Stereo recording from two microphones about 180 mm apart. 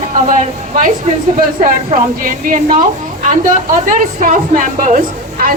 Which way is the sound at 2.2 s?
50° right (ahead or behind).